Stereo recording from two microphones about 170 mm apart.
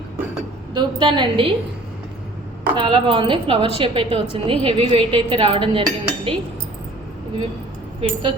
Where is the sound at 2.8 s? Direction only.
30° right (ahead or behind).